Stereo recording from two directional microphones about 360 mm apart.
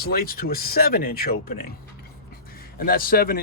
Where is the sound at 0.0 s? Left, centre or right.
Left.